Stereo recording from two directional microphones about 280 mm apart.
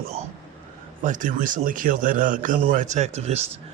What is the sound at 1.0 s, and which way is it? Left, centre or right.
Speech, right.